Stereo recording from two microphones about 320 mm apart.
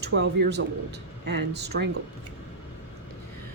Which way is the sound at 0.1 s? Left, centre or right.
Right.